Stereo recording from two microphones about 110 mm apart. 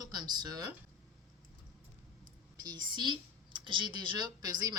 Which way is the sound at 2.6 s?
40° right (ahead or behind).